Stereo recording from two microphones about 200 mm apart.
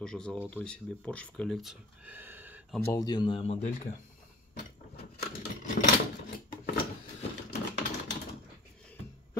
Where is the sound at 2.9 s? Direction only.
20° left (ahead or behind).